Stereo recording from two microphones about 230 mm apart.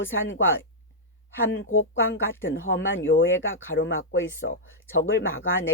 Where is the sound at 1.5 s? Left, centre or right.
Left.